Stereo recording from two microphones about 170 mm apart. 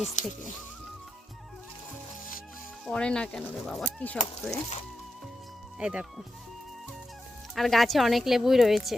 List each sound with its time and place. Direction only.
0.0 s speech: 45° left (ahead or behind)
2.8 s speech: 5° left (ahead or behind)
5.8 s speech: 5° right (ahead or behind)
7.5 s speech: centre (ahead or behind)